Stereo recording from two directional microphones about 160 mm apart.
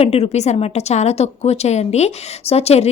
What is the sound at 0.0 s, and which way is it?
A woman's voice, 40° left (ahead or behind).